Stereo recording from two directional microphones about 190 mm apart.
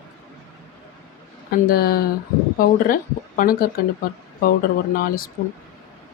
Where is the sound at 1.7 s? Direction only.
55° left (ahead or behind).